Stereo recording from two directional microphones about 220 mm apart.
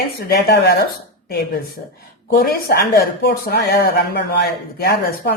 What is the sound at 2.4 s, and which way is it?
Speech, 45° left (ahead or behind).